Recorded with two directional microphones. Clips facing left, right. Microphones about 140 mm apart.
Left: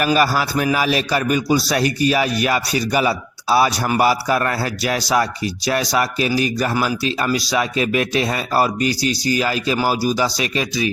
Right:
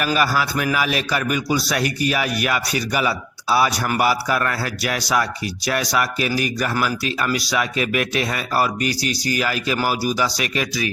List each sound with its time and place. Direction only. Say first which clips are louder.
0.0 s a man's voice: left 3 dB; 35° left (ahead or behind)